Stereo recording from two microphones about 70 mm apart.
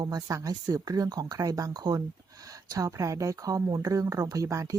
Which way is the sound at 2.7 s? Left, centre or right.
Right.